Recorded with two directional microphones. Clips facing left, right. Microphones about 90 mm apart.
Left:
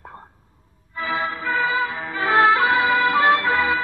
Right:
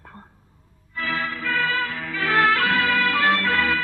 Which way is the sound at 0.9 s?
20° left (ahead or behind).